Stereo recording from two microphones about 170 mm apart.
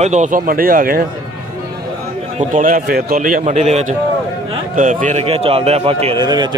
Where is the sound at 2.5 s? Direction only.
50° right (ahead or behind).